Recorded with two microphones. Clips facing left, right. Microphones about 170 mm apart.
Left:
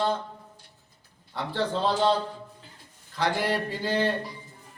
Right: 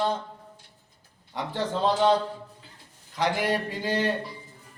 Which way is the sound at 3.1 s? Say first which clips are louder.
Right 1 dB; 15° right (ahead or behind).